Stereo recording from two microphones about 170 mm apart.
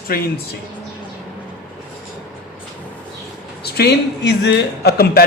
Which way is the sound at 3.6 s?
75° left (ahead or behind).